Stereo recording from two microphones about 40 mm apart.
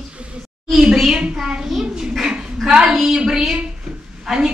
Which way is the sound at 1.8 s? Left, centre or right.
Centre.